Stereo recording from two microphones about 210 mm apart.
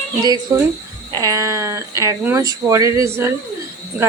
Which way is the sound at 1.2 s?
15° right (ahead or behind).